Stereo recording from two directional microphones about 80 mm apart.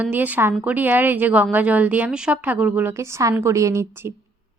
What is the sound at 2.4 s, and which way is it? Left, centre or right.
Speech, right.